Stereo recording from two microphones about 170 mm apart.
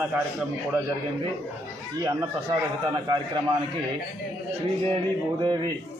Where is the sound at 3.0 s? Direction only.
25° right (ahead or behind).